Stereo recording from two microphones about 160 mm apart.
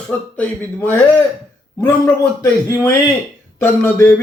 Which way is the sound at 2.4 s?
15° left (ahead or behind).